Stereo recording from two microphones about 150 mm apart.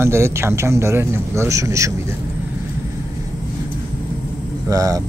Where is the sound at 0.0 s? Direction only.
15° right (ahead or behind).